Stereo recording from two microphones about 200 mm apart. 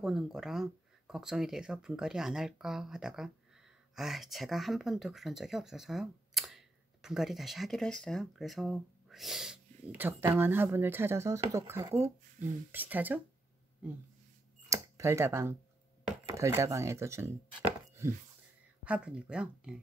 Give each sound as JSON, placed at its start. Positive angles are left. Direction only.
{"t": 0.0, "sound": "speech", "side_deg": 0}
{"t": 14.7, "sound": "a sound", "side_deg": -15}
{"t": 16.1, "sound": "speech", "side_deg": -15}
{"t": 18.9, "sound": "speech", "side_deg": -5}